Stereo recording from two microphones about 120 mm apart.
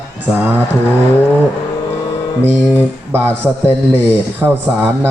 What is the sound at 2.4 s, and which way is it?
Mantra, 20° right (ahead or behind).